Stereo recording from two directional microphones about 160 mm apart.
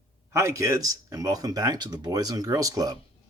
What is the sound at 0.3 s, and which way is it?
Speech, 20° right (ahead or behind).